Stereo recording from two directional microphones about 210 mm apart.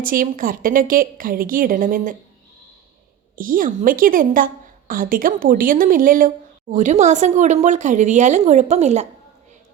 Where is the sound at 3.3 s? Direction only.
40° right (ahead or behind).